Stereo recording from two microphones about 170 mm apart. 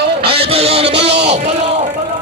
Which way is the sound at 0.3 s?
35° right (ahead or behind).